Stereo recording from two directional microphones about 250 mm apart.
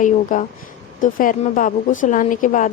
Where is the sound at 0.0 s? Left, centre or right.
Left.